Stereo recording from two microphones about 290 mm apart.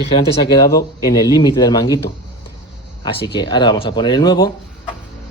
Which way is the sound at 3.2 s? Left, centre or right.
Centre.